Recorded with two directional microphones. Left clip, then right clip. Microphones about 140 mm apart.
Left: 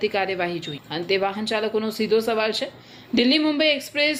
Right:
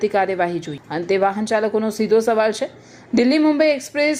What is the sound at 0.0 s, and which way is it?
A woman's voice, 30° right (ahead or behind).